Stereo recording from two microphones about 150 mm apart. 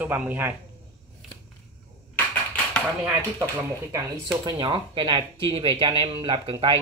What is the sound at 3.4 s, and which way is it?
Speech, 20° right (ahead or behind).